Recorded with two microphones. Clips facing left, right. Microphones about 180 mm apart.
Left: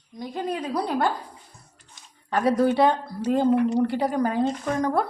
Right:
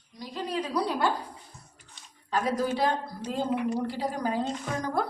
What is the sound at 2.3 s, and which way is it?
A woman's voice, 60° left (ahead or behind).